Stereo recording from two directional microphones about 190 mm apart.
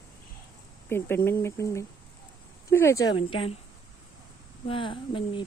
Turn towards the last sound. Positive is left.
turn(degrees=25)  # may be behind; listen again after turning